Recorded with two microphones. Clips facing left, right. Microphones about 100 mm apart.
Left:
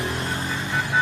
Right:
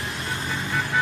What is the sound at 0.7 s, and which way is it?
Vehicle, 15° left (ahead or behind).